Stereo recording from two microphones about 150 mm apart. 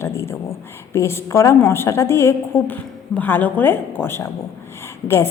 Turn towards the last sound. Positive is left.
turn(degrees=15)  # may be behind; listen again after turning